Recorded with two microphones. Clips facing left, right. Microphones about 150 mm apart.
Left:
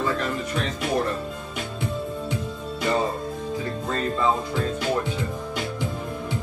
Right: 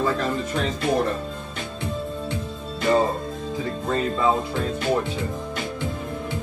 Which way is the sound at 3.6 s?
20° right (ahead or behind).